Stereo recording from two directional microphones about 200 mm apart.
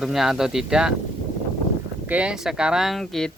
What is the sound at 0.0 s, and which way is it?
Speech, centre (ahead or behind).